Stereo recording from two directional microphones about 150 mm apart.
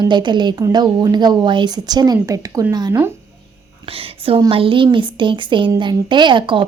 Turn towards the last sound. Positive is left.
turn(degrees=-30)  # may be behind; listen again after turning